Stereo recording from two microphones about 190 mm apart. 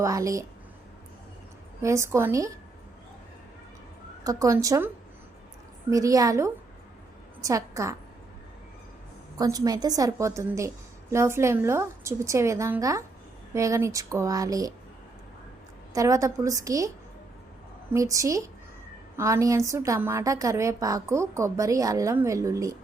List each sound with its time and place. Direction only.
0.0 s a woman's voice: 15° right (ahead or behind)
1.8 s a woman's voice: 15° right (ahead or behind)
4.2 s a woman's voice: 15° right (ahead or behind)
5.9 s a woman's voice: 15° right (ahead or behind)
9.4 s a woman's voice: 20° right (ahead or behind)
15.9 s a woman's voice: 15° right (ahead or behind)
17.9 s a woman's voice: 15° right (ahead or behind)